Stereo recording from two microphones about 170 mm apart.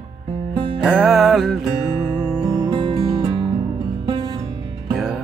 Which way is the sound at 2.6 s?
30° right (ahead or behind).